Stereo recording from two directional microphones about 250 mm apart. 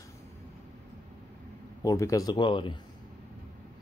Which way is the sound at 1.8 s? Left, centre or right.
Centre.